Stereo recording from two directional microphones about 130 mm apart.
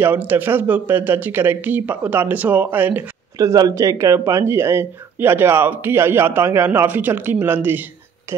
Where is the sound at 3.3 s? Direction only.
30° right (ahead or behind).